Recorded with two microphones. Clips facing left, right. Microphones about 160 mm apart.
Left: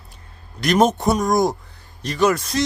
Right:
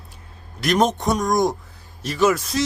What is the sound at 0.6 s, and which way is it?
Speech, centre (ahead or behind).